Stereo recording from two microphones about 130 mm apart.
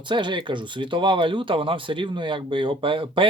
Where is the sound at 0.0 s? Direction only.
35° right (ahead or behind).